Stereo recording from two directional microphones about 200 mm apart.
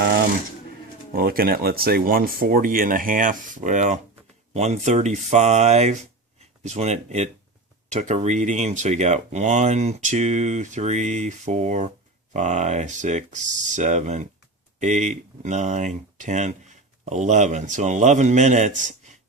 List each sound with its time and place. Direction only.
1.1 s speech: 50° right (ahead or behind)